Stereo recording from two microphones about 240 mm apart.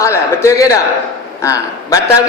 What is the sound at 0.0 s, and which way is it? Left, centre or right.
A man's voice, centre.